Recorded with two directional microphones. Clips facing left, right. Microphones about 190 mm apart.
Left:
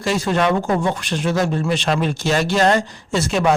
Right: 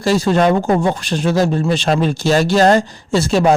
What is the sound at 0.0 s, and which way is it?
Speech, 35° right (ahead or behind).